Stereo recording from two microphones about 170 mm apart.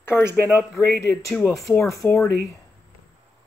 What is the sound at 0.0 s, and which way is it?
Speech, 15° left (ahead or behind).